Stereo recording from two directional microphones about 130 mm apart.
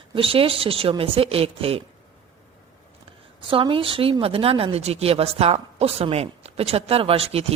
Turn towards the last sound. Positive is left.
turn(degrees=-50)  # may be behind; listen again after turning